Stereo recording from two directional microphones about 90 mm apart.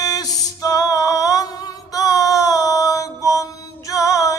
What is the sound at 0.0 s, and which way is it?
Music, 45° left (ahead or behind).